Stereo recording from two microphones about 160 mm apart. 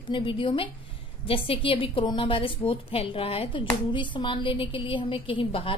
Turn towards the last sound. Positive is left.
turn(degrees=35)  # may be behind; listen again after turning